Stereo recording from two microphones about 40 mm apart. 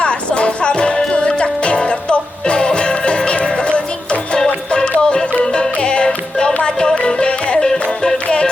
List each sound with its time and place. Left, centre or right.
0.0 s music: left